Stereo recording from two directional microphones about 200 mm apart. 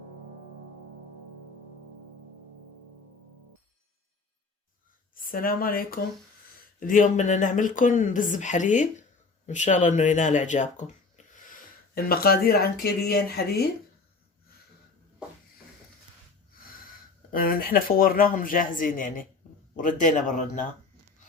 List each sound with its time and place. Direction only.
5.2 s speech: 45° left (ahead or behind)
11.9 s speech: 50° left (ahead or behind)
17.3 s speech: 45° left (ahead or behind)